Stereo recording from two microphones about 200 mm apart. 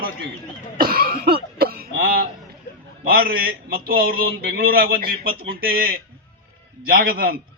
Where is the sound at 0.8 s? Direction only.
45° right (ahead or behind).